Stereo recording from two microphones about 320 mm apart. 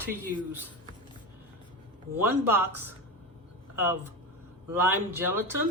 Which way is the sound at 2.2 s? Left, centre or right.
Centre.